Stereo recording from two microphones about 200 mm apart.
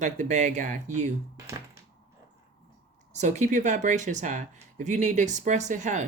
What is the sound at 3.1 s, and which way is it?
Speech, 35° right (ahead or behind).